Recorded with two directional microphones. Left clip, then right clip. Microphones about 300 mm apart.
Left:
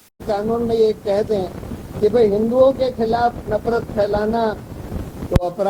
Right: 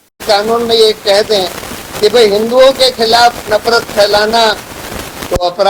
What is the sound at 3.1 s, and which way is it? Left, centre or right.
Speech, centre.